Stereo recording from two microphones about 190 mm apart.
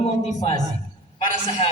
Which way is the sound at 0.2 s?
35° left (ahead or behind).